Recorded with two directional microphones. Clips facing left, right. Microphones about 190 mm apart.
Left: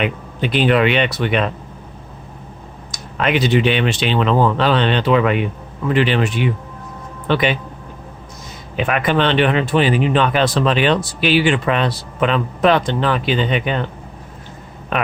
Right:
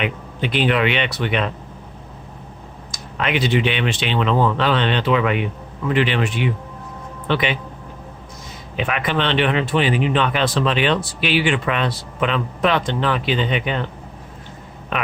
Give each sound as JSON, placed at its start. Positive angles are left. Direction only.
{"t": 0.0, "sound": "speech", "side_deg": 40}
{"t": 2.9, "sound": "a man's voice", "side_deg": 45}
{"t": 8.7, "sound": "speech", "side_deg": 45}